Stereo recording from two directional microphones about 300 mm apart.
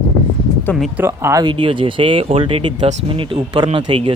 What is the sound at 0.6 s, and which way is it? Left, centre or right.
Speech, centre.